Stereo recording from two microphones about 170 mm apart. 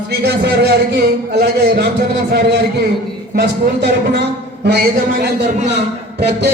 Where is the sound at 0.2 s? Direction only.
75° right (ahead or behind).